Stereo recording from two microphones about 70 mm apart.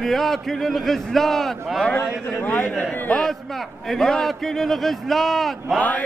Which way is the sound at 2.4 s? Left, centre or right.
Left.